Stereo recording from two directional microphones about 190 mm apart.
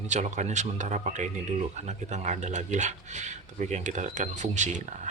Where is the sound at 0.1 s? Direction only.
40° right (ahead or behind).